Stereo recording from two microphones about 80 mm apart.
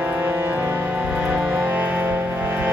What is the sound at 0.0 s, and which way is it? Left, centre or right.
Music, right.